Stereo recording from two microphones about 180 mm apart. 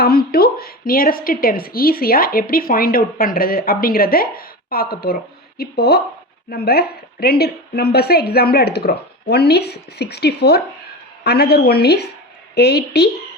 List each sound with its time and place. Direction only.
0.0 s a woman's voice: 60° left (ahead or behind)